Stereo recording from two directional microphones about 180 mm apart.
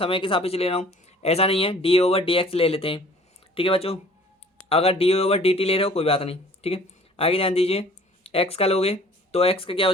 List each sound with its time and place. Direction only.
0.0 s speech: 30° left (ahead or behind)